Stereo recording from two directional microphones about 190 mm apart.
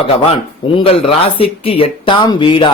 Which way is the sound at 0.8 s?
30° left (ahead or behind).